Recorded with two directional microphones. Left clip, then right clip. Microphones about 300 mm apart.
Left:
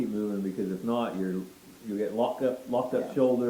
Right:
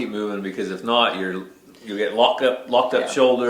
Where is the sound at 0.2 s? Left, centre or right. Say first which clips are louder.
Right 6 dB; centre.